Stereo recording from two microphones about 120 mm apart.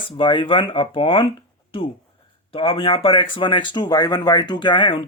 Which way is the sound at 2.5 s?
50° left (ahead or behind).